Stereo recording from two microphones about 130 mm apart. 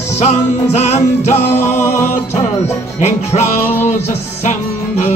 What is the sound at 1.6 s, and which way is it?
Music, 20° left (ahead or behind).